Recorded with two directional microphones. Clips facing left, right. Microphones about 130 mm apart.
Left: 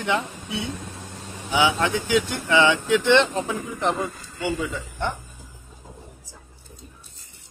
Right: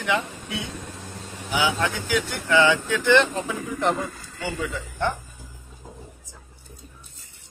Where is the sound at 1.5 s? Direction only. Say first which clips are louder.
Left 3 dB; 20° left (ahead or behind).